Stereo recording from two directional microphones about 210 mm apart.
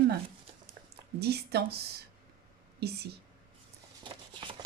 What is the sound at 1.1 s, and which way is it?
A woman's voice, 50° right (ahead or behind).